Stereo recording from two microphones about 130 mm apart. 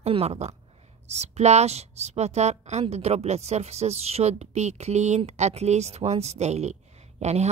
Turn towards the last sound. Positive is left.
turn(degrees=-60)  # may be behind; listen again after turning